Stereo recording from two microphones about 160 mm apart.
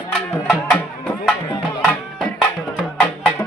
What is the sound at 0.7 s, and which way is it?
Music, 5° left (ahead or behind).